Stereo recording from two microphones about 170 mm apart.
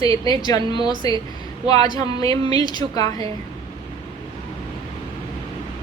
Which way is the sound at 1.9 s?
20° left (ahead or behind).